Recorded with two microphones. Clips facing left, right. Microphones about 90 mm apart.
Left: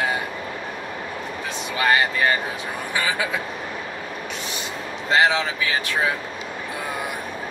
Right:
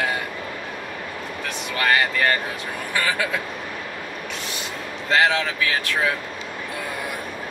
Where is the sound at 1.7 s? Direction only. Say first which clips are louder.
Left 1 dB; 20° left (ahead or behind).